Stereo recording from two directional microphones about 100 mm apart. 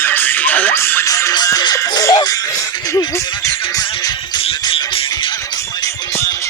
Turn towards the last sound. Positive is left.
turn(degrees=55)  # may be behind; listen again after turning